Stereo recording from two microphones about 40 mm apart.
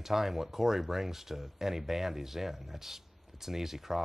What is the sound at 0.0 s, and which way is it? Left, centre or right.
Speech, centre.